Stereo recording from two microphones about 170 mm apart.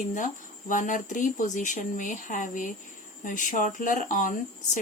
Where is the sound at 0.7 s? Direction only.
50° left (ahead or behind).